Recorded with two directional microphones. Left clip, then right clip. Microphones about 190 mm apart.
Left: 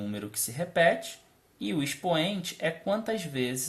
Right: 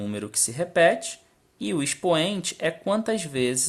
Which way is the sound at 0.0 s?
35° right (ahead or behind).